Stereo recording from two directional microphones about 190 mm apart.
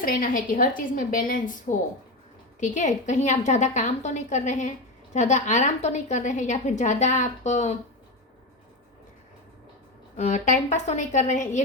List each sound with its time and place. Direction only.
0.0 s a woman's voice: 45° left (ahead or behind)
10.2 s a woman's voice: 40° left (ahead or behind)